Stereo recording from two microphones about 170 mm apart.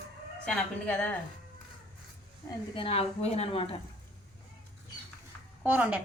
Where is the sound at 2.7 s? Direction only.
35° left (ahead or behind).